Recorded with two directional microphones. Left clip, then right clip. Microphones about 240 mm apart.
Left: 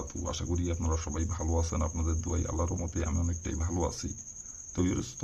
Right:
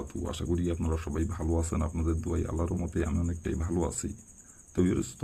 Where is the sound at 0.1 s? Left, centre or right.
Centre.